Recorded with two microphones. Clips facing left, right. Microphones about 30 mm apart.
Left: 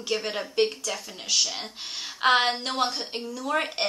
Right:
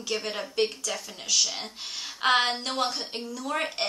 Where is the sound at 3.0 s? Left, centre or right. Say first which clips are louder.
Left 2 dB; centre.